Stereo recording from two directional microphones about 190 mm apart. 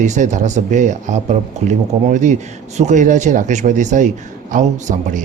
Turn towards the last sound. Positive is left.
turn(degrees=-40)  # may be behind; listen again after turning